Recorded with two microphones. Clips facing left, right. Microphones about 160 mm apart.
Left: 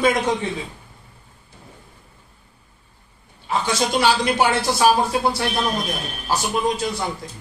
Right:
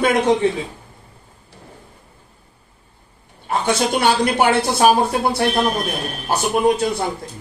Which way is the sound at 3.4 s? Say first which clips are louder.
Right 3 dB; 55° right (ahead or behind).